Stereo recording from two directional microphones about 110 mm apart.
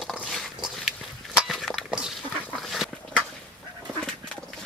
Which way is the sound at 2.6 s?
5° left (ahead or behind).